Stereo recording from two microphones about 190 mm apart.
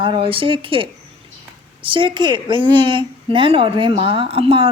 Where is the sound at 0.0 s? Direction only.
25° right (ahead or behind).